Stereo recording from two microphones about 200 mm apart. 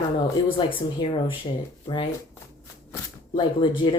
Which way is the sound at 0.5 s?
25° left (ahead or behind).